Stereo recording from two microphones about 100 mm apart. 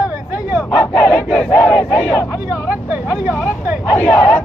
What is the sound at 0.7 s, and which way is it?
Speech, 10° left (ahead or behind).